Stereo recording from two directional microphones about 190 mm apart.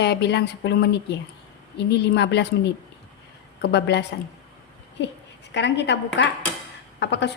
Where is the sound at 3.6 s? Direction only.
65° left (ahead or behind).